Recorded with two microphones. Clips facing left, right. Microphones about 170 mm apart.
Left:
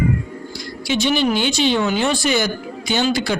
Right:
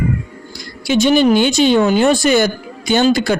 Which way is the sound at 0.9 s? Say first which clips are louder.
Right 7 dB; 45° right (ahead or behind).